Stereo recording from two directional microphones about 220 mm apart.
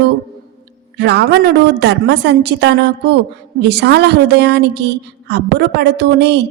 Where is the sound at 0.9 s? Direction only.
50° right (ahead or behind).